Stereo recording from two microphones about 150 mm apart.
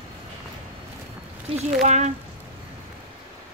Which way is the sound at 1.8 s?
50° right (ahead or behind).